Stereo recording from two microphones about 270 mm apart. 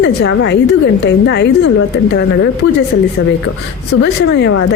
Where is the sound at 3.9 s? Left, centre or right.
Left.